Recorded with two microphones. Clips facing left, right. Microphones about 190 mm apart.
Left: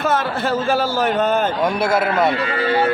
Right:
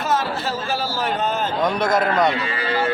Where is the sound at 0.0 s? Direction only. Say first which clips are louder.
Left 3 dB; 55° left (ahead or behind).